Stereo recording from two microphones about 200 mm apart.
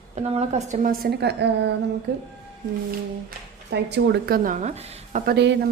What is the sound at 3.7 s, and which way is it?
A woman's voice, 60° right (ahead or behind).